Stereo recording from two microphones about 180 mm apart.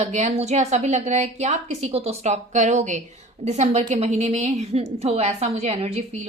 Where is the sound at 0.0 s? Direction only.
40° right (ahead or behind).